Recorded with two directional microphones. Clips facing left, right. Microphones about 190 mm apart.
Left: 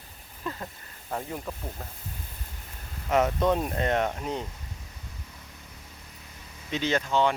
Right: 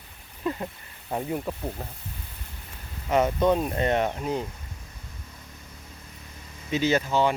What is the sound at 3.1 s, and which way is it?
Speech, centre (ahead or behind).